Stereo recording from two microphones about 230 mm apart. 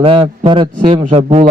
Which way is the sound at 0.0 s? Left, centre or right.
Right.